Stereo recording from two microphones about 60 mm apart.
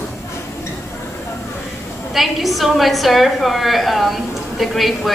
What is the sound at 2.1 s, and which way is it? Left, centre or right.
A woman's voice, centre.